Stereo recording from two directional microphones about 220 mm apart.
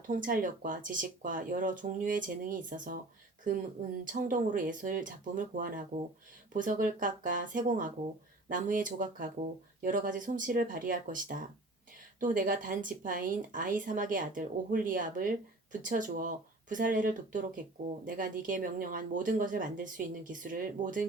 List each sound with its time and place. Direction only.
0.1 s speech: 40° right (ahead or behind)
4.0 s speech: 35° right (ahead or behind)